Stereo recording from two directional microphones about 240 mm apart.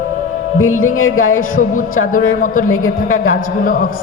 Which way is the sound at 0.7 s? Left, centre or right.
Left.